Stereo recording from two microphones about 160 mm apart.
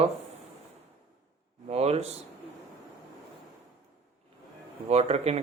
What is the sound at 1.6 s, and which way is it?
Speech, 40° right (ahead or behind).